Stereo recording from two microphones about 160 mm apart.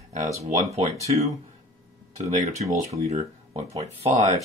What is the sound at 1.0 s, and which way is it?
Speech, 45° right (ahead or behind).